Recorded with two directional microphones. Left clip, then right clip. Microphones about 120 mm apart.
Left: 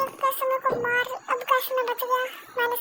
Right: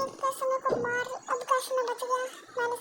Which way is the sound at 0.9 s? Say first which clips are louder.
Left 6 dB; 40° left (ahead or behind).